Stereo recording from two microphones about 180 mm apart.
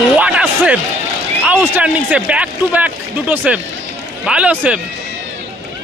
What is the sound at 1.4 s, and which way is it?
A man's voice, 10° right (ahead or behind).